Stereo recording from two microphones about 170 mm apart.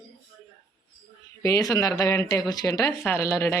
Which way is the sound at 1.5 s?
20° left (ahead or behind).